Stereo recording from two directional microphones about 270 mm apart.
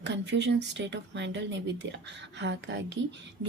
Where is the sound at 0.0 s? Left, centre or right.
Right.